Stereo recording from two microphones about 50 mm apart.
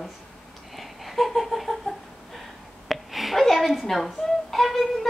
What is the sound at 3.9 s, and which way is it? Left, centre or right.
Speech, centre.